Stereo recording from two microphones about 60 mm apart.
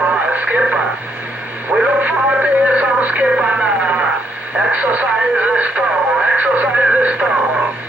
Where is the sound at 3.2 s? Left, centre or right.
Centre.